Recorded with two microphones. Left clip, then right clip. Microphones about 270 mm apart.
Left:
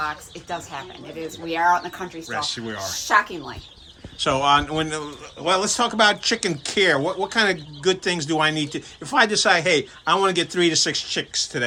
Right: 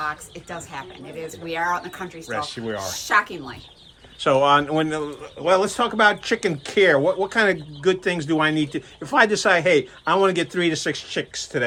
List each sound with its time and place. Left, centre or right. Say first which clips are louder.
0.0 s a woman's voice: even; left
2.2 s speech: even; centre
3.1 s speech: left 1 dB; centre
4.2 s speech: right 2 dB; centre